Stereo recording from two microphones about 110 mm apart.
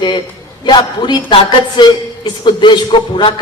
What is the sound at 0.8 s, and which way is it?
A man's voice, 40° left (ahead or behind).